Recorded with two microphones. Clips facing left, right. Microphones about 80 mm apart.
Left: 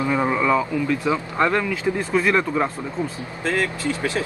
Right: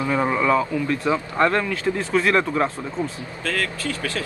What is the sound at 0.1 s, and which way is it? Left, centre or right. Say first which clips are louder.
Speech: right 1 dB; centre.